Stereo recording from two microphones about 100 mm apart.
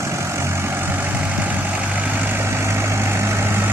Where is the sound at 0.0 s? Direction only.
30° right (ahead or behind).